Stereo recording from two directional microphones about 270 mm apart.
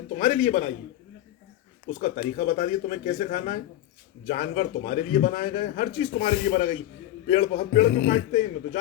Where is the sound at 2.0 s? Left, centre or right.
Left.